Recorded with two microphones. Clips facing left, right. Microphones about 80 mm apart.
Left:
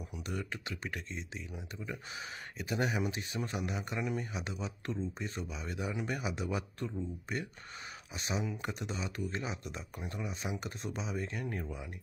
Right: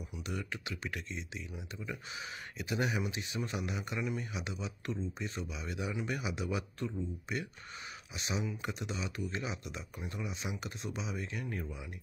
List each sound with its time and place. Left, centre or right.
0.0 s speech: left